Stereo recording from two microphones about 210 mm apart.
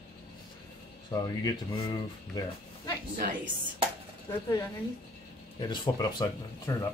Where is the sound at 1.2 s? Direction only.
20° left (ahead or behind).